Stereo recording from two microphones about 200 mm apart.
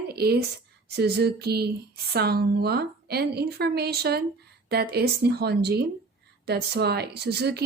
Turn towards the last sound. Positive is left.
turn(degrees=-55)  # may be behind; listen again after turning